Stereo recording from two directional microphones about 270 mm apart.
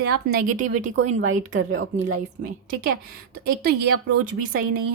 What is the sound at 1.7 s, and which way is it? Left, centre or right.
Speech, right.